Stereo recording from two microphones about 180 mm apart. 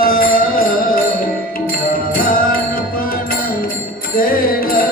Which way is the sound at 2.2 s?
50° left (ahead or behind).